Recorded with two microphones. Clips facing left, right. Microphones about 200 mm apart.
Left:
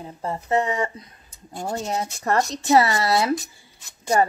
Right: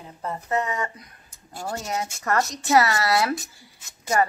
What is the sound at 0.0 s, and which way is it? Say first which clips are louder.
Speech: left 3 dB; 30° left (ahead or behind).